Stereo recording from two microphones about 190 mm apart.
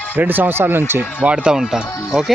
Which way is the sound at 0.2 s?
10° right (ahead or behind).